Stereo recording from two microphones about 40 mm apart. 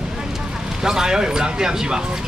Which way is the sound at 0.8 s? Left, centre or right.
Centre.